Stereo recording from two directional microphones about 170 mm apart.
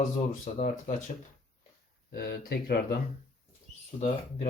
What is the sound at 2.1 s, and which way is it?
Speech, 65° left (ahead or behind).